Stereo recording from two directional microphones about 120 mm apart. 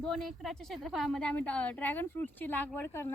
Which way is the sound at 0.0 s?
Centre (ahead or behind).